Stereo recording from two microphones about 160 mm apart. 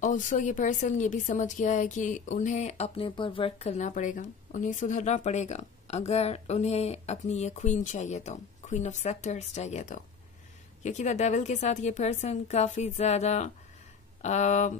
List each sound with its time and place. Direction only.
0.0 s a woman's voice: 50° left (ahead or behind)